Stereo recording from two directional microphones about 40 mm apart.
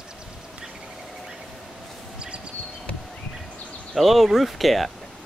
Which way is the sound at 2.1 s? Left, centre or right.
Right.